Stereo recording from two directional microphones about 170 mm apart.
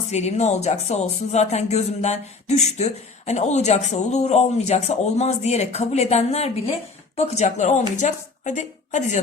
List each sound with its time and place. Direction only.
0.1 s a woman's voice: 40° left (ahead or behind)